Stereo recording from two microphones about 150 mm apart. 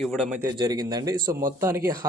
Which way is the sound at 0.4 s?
25° right (ahead or behind).